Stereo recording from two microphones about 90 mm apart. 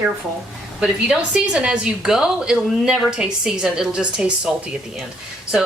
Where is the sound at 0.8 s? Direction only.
10° right (ahead or behind).